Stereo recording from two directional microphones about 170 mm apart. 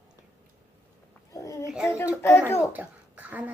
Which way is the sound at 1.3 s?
20° left (ahead or behind).